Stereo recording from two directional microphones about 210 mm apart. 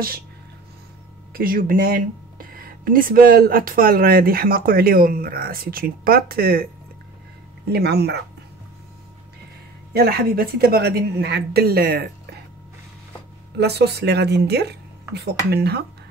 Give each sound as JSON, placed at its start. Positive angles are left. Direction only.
{"t": 1.3, "sound": "speech", "side_deg": -45}
{"t": 7.7, "sound": "speech", "side_deg": -50}
{"t": 9.9, "sound": "speech", "side_deg": -45}
{"t": 13.6, "sound": "speech", "side_deg": -50}